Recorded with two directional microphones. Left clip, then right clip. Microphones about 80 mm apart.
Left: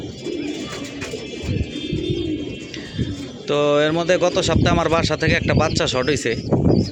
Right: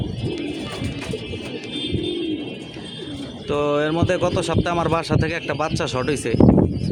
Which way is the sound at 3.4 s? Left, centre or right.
Centre.